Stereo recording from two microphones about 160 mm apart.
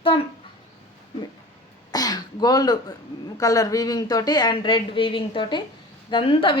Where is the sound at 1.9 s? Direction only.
25° left (ahead or behind).